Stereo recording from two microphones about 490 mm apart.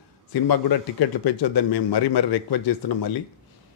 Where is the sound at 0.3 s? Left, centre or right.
Left.